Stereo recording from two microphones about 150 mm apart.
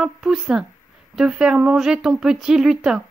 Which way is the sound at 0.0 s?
5° right (ahead or behind).